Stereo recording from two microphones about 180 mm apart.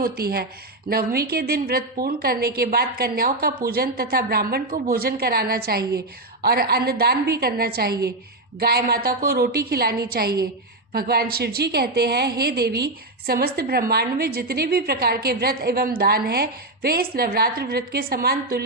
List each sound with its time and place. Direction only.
0.0 s a woman's voice: 60° right (ahead or behind)